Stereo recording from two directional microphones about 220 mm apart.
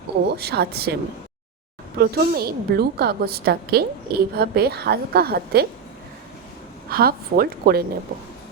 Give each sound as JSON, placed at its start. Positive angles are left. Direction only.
{"t": 0.3, "sound": "a woman's voice", "side_deg": -45}
{"t": 2.0, "sound": "a woman's voice", "side_deg": -45}
{"t": 6.9, "sound": "a woman's voice", "side_deg": -45}